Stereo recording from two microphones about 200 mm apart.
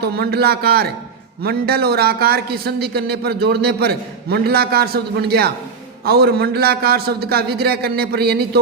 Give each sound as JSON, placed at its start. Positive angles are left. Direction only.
{"t": 0.0, "sound": "a man's voice", "side_deg": -50}